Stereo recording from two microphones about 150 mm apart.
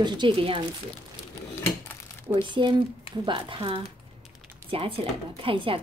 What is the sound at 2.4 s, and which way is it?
A woman's voice, 30° right (ahead or behind).